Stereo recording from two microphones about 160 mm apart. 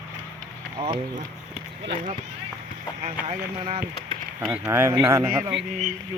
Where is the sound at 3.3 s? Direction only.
35° right (ahead or behind).